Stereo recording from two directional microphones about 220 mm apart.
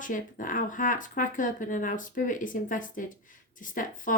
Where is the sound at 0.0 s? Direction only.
35° left (ahead or behind).